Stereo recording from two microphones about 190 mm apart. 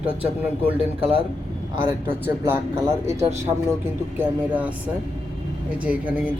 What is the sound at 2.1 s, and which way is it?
Speech, 10° right (ahead or behind).